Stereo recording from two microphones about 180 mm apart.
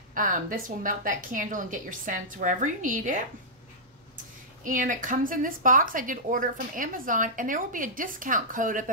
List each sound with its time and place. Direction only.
0.1 s a woman's voice: 45° right (ahead or behind)
4.6 s a woman's voice: 50° right (ahead or behind)